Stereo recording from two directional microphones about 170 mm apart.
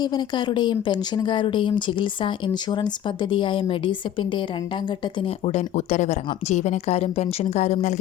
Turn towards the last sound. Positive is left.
turn(degrees=45)  # may be behind; listen again after turning